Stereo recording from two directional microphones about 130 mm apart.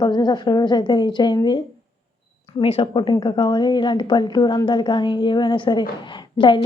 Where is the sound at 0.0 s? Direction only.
35° left (ahead or behind).